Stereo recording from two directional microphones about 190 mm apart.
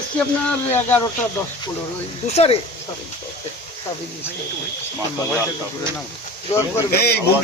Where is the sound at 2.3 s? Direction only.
35° left (ahead or behind).